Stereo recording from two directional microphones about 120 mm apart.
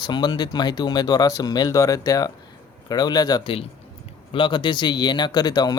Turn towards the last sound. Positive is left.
turn(degrees=35)  # may be behind; listen again after turning